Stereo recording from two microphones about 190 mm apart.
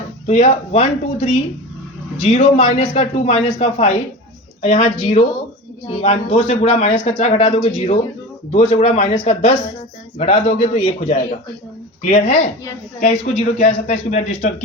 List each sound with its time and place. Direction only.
0.3 s a man's voice: 35° left (ahead or behind)